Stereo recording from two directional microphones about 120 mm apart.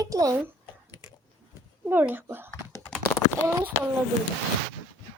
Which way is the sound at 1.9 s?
15° right (ahead or behind).